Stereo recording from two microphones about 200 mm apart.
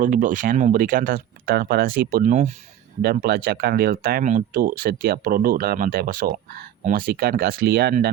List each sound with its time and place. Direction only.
0.0 s speech: 40° right (ahead or behind)
3.0 s speech: 50° right (ahead or behind)